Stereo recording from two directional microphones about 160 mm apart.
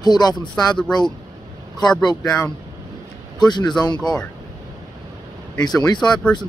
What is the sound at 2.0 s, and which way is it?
Speech, 25° left (ahead or behind).